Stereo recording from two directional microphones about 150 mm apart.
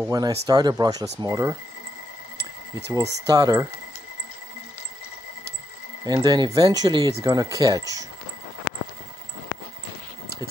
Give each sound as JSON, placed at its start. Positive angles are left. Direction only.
{"t": 0.1, "sound": "speech", "side_deg": -25}
{"t": 2.7, "sound": "speech", "side_deg": -25}
{"t": 6.0, "sound": "speech", "side_deg": -25}